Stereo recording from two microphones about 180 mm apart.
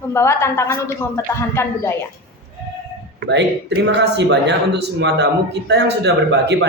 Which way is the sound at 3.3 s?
75° right (ahead or behind).